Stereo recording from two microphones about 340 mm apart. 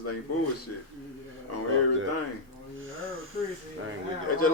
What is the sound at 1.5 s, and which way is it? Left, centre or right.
Speech, left.